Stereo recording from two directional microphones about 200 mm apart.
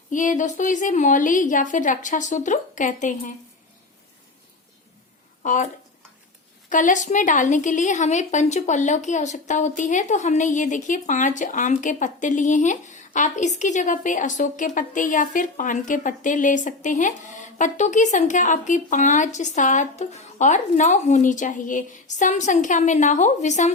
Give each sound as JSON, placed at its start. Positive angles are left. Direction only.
{"t": 0.1, "sound": "a woman's voice", "side_deg": 40}
{"t": 5.4, "sound": "speech", "side_deg": 40}
{"t": 6.7, "sound": "a woman's voice", "side_deg": 40}